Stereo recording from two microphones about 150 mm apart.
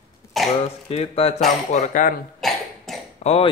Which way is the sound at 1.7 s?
55° left (ahead or behind).